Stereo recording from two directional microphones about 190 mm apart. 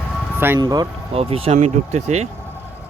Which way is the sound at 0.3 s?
10° right (ahead or behind).